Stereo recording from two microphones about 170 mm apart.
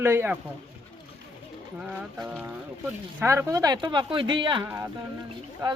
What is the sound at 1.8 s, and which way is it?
Speech, 5° right (ahead or behind).